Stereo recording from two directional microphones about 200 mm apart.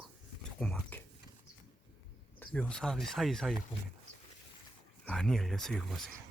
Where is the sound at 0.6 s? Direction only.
5° left (ahead or behind).